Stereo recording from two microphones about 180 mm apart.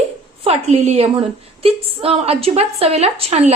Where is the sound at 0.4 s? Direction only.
35° right (ahead or behind).